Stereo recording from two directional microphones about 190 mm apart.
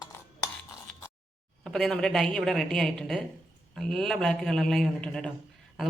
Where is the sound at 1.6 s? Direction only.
5° left (ahead or behind).